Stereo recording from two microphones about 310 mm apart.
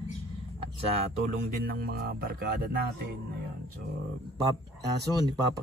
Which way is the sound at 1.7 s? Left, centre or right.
Right.